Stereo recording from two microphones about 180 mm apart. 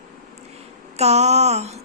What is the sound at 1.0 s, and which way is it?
Speech, 35° right (ahead or behind).